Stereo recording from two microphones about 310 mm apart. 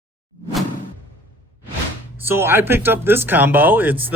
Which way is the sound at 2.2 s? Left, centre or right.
Centre.